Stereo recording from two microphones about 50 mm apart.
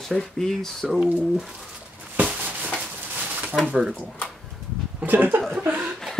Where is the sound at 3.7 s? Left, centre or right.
Centre.